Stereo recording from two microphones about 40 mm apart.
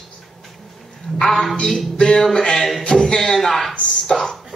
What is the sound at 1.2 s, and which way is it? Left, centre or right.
Speech, centre.